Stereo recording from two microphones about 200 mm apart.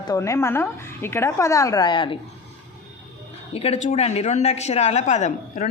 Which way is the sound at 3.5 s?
30° left (ahead or behind).